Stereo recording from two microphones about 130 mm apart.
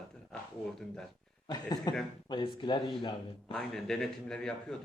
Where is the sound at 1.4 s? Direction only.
30° left (ahead or behind).